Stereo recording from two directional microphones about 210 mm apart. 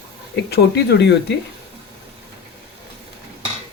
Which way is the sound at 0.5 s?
55° left (ahead or behind).